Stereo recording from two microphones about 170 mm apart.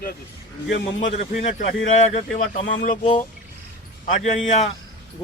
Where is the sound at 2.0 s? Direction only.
40° left (ahead or behind).